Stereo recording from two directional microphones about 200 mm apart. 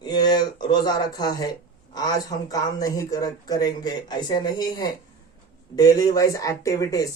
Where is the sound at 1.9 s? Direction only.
20° left (ahead or behind).